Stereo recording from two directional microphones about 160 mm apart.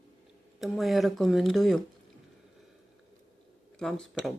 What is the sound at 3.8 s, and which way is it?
Speech, centre (ahead or behind).